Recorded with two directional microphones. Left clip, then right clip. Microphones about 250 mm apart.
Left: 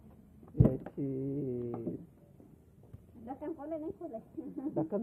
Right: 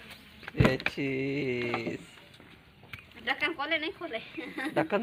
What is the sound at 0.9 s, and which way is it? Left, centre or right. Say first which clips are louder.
Speech: right 6 dB; right.